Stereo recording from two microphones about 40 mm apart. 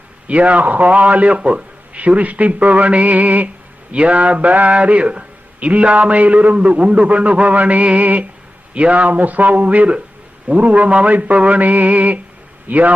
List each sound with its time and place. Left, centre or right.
0.3 s a man's voice: right